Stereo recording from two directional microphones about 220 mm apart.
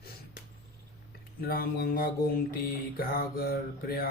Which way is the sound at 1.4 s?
40° left (ahead or behind).